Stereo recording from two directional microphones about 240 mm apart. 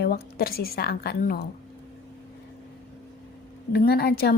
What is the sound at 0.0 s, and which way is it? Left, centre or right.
A woman's voice, left.